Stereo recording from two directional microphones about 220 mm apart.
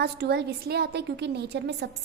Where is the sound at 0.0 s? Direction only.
50° right (ahead or behind).